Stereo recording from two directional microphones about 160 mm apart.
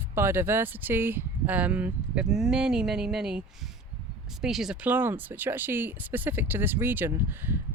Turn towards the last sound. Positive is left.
turn(degrees=-15)  # may be behind; listen again after turning